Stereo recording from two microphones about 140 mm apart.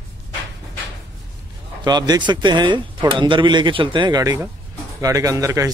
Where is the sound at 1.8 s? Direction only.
30° right (ahead or behind).